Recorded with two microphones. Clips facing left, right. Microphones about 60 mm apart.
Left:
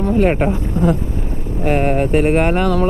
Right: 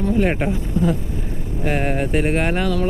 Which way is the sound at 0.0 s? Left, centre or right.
Left.